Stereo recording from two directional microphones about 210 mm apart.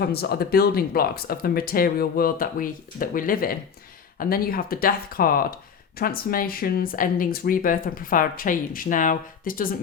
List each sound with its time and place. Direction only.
0.0 s speech: 50° left (ahead or behind)